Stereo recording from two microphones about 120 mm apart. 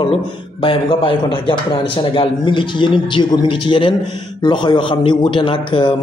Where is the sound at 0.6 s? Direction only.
50° left (ahead or behind).